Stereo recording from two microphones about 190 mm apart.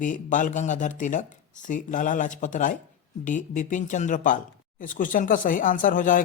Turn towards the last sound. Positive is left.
turn(degrees=45)  # may be behind; listen again after turning